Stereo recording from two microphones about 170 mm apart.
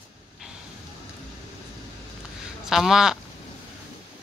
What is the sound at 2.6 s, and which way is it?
Speech, centre (ahead or behind).